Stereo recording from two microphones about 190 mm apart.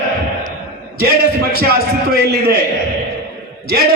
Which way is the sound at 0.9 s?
55° right (ahead or behind).